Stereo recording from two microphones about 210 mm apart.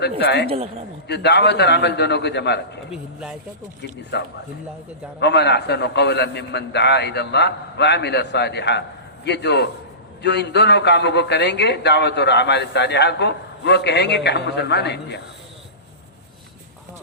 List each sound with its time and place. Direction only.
0.0 s a man's voice: 50° left (ahead or behind)
2.9 s speech: 5° right (ahead or behind)
4.1 s a man's voice: 50° left (ahead or behind)